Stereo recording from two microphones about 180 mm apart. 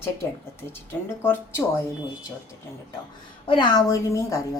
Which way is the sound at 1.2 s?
15° left (ahead or behind).